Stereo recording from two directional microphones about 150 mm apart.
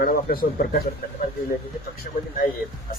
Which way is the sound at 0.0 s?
80° left.